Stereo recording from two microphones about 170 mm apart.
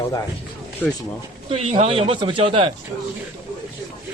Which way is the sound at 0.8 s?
10° left (ahead or behind).